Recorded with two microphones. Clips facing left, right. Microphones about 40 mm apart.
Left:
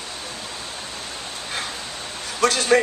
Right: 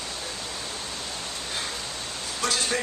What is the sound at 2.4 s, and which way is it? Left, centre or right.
Speech, left.